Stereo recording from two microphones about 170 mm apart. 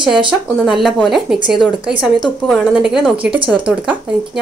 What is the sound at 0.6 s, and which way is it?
Speech, 5° right (ahead or behind).